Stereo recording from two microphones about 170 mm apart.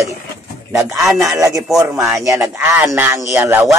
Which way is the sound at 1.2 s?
20° right (ahead or behind).